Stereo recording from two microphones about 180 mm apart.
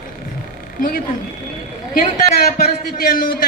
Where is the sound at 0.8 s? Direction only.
50° left (ahead or behind).